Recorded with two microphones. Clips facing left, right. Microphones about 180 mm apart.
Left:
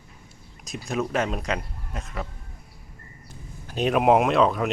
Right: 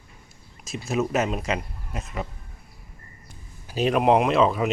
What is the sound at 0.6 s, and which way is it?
Speech, centre (ahead or behind).